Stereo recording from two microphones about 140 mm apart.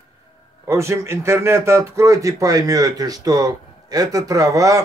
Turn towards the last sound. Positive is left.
turn(degrees=-25)  # may be behind; listen again after turning